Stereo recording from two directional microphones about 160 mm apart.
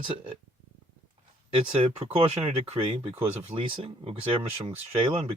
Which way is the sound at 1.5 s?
35° right (ahead or behind).